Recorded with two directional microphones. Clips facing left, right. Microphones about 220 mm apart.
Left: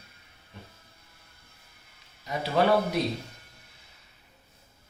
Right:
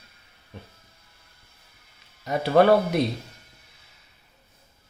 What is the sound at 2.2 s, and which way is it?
Speech, 55° right (ahead or behind).